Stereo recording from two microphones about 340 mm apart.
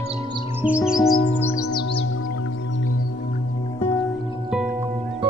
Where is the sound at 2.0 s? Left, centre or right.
Left.